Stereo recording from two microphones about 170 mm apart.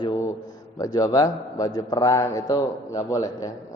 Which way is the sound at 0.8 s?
20° left (ahead or behind).